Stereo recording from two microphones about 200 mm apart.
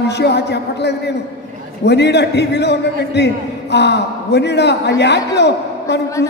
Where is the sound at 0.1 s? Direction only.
55° left (ahead or behind).